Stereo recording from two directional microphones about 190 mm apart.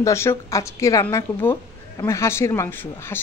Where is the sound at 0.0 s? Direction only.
15° left (ahead or behind).